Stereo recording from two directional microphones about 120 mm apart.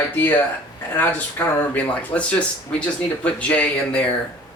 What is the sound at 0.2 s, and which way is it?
Speech, 15° left (ahead or behind).